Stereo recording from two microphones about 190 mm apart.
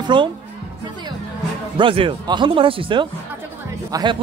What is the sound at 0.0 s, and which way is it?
Speech, 25° right (ahead or behind).